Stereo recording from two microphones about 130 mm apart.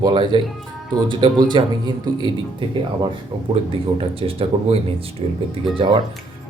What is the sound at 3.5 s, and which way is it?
Speech, 40° right (ahead or behind).